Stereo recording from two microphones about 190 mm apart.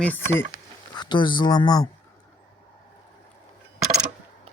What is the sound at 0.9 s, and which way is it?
Speech, 25° left (ahead or behind).